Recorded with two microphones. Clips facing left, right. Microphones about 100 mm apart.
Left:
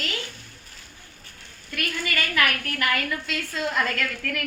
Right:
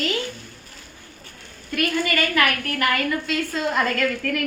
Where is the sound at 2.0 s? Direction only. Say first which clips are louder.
Left 1 dB; 40° right (ahead or behind).